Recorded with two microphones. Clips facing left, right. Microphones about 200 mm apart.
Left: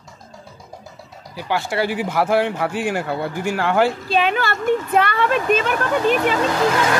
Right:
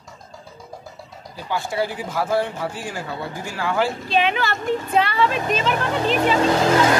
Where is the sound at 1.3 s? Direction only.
75° left (ahead or behind).